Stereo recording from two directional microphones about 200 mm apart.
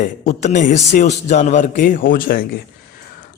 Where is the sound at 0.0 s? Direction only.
35° left (ahead or behind).